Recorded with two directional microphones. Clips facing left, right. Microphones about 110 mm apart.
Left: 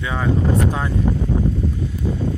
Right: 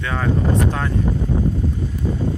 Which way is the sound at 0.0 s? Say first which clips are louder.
Even; 10° left (ahead or behind).